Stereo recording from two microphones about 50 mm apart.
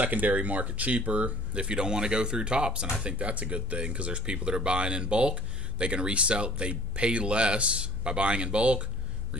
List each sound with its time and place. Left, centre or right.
0.0 s speech: right